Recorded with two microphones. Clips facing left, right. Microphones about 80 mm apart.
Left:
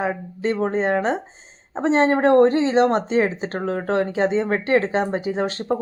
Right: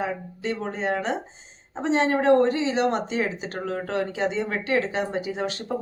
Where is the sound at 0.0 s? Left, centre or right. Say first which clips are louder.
Left 5 dB; left.